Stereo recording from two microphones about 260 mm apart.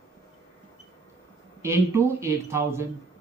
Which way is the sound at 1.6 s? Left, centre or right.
Centre.